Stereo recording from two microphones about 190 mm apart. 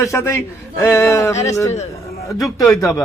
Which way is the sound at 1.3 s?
35° left (ahead or behind).